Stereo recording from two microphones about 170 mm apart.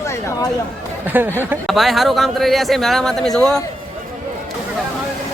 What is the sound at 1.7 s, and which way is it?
Speech, centre (ahead or behind).